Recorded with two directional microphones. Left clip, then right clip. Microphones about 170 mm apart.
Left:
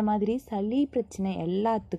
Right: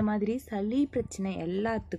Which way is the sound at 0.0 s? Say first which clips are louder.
Left 4 dB; 25° left (ahead or behind).